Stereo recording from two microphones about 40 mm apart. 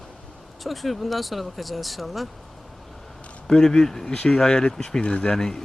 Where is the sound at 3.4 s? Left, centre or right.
Centre.